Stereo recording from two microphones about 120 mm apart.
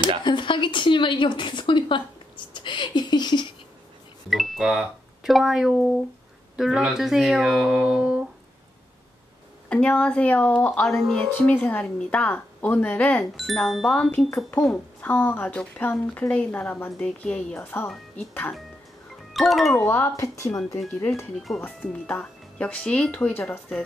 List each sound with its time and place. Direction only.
0.2 s a woman's voice: 40° left (ahead or behind)
4.3 s speech: centre (ahead or behind)
9.7 s a woman's voice: 10° left (ahead or behind)
13.2 s speech: centre (ahead or behind)
14.1 s a woman's voice: 20° left (ahead or behind)
17.6 s a woman's voice: 20° left (ahead or behind)
19.3 s speech: centre (ahead or behind)
19.7 s speech: 20° left (ahead or behind)
21.5 s a woman's voice: 5° left (ahead or behind)